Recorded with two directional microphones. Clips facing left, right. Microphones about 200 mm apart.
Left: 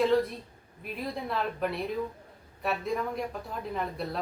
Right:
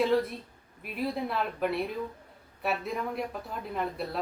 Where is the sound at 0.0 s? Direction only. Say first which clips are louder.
Left 1 dB; centre (ahead or behind).